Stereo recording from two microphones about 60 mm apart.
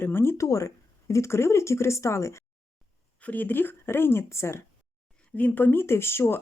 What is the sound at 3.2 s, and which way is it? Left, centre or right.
Speech, left.